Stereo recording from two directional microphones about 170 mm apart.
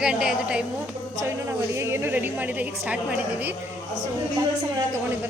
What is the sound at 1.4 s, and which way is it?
A woman's voice, 15° right (ahead or behind).